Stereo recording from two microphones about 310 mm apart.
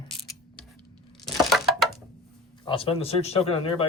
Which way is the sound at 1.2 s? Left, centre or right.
Centre.